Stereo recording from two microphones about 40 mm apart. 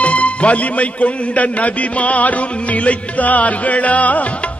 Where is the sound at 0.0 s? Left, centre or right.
Left.